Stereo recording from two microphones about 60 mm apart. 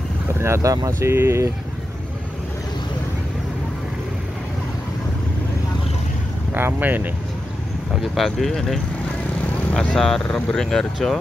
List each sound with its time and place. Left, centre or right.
0.3 s vehicle: right
0.6 s speech: right
6.5 s speech: right
7.9 s speech: centre
9.9 s speech: centre